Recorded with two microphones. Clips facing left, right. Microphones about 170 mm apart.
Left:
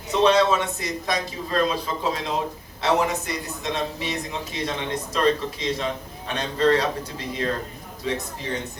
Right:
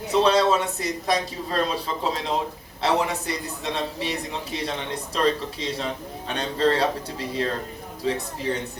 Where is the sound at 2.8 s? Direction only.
35° right (ahead or behind).